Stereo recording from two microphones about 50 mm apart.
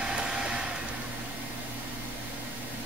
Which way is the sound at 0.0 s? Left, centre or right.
Centre.